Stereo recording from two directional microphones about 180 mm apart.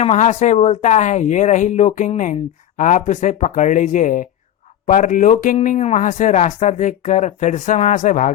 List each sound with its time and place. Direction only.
0.0 s speech: 40° left (ahead or behind)